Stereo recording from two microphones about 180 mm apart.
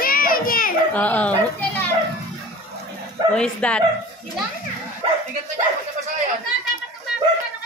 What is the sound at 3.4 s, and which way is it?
Speech, 5° left (ahead or behind).